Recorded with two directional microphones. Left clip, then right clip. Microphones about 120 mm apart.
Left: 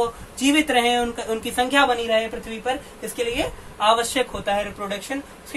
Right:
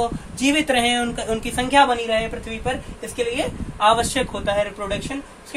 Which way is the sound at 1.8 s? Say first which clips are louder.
Left 1 dB; 30° right (ahead or behind).